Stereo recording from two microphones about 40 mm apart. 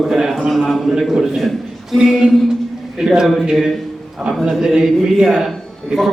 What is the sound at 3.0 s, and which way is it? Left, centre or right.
A man's voice, centre.